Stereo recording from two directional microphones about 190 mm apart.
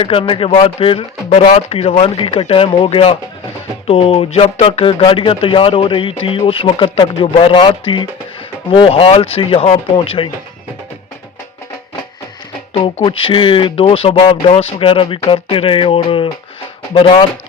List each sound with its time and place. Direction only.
0.0 s speech: 30° left (ahead or behind)
12.7 s speech: 25° left (ahead or behind)